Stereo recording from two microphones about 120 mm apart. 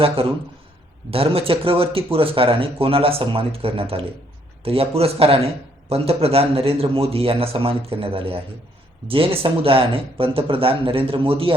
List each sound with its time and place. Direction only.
0.2 s speech: 50° right (ahead or behind)